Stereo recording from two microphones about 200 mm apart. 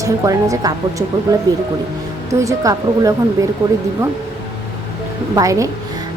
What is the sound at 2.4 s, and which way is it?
A woman's voice, 15° right (ahead or behind).